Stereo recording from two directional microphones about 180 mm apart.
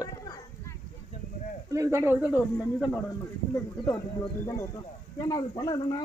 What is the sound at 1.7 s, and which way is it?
Speech, 15° right (ahead or behind).